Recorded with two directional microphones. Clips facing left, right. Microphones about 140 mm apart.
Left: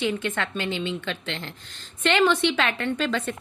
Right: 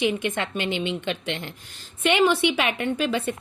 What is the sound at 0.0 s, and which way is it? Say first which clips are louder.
Speech: right 2 dB; 15° right (ahead or behind).